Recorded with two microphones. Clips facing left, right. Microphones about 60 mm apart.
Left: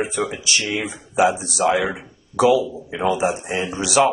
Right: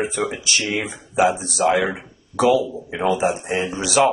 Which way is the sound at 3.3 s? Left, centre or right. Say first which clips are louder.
Right 1 dB; right.